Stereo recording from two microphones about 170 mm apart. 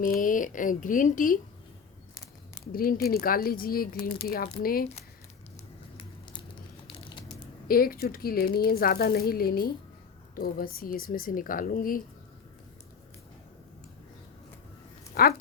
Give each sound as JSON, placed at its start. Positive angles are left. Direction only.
{"t": 0.0, "sound": "speech", "side_deg": 55}
{"t": 2.7, "sound": "speech", "side_deg": 60}
{"t": 7.7, "sound": "speech", "side_deg": 60}
{"t": 15.1, "sound": "speech", "side_deg": 65}